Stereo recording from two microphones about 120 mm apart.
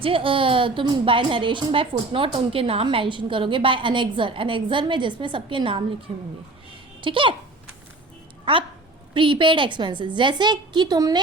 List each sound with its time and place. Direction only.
0.0 s a woman's voice: 45° right (ahead or behind)
7.0 s a woman's voice: 45° right (ahead or behind)
9.1 s a woman's voice: 45° right (ahead or behind)